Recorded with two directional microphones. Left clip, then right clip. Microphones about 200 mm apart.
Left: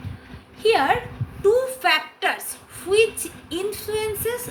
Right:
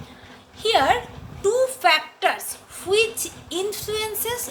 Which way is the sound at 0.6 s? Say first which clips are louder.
Even; 35° right (ahead or behind).